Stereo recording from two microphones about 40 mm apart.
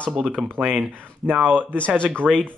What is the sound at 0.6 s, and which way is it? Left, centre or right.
Speech, right.